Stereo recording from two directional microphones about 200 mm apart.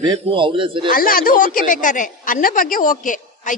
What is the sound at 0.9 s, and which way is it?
A woman's voice, 45° left (ahead or behind).